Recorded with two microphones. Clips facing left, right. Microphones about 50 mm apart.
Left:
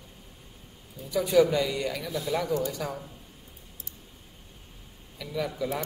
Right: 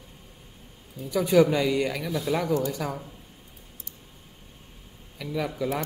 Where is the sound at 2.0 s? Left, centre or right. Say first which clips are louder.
Right 3 dB; right.